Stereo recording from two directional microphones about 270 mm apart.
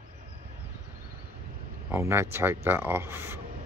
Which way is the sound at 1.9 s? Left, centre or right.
Centre.